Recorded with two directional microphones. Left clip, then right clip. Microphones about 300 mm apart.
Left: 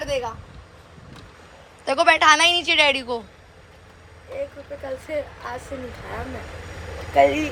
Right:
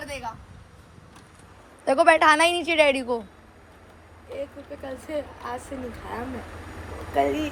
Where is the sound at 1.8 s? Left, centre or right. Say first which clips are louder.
Left 1 dB; centre.